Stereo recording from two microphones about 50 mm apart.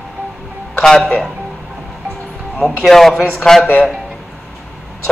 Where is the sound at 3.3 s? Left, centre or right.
Centre.